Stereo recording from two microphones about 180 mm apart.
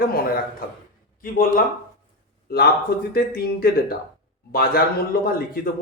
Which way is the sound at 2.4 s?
60° left (ahead or behind).